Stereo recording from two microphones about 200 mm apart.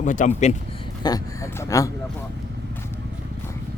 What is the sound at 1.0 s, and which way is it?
Speech, 15° left (ahead or behind).